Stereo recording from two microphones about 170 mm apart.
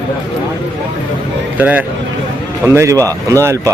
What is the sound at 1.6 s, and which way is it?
A man's voice, 10° right (ahead or behind).